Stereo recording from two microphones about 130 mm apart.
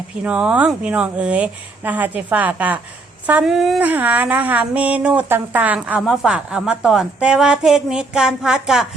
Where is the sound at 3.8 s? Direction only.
10° right (ahead or behind).